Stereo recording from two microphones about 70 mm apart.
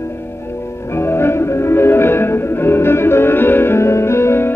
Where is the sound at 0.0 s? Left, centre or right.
Left.